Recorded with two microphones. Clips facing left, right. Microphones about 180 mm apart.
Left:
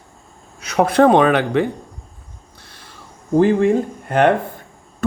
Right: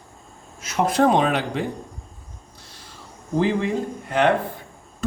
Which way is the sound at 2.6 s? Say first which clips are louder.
Left 3 dB; 60° left (ahead or behind).